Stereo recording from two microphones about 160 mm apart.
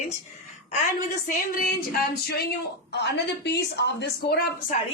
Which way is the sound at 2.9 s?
90° left.